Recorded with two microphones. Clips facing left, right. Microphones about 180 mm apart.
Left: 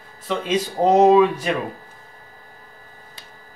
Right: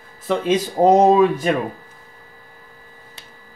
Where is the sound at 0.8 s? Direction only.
40° right (ahead or behind).